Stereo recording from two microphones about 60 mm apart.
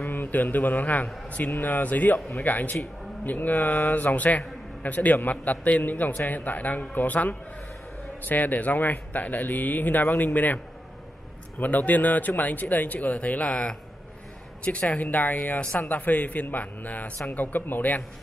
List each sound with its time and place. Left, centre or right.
0.0 s a man's voice: left
11.6 s a man's voice: left